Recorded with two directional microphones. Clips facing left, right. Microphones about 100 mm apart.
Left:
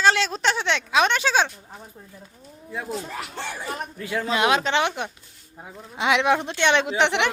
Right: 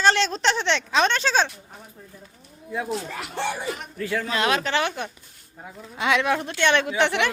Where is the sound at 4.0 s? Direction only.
15° left (ahead or behind).